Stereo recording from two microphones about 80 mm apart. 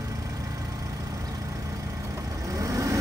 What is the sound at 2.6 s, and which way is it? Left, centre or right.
Vehicle, right.